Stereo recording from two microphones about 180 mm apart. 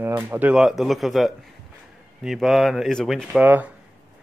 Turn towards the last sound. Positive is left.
turn(degrees=-10)  # may be behind; listen again after turning